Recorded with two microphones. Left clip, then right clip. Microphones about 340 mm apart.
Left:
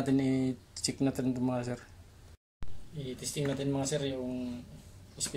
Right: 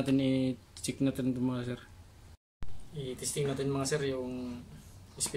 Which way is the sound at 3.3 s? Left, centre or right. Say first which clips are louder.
Even; right.